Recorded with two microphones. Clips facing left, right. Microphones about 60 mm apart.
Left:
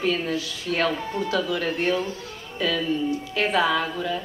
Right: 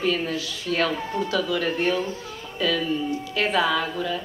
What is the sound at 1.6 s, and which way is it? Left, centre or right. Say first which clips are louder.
Speech: right 1 dB; right.